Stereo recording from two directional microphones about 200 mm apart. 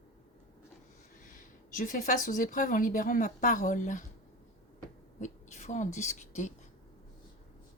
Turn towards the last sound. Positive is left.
turn(degrees=35)  # may be behind; listen again after turning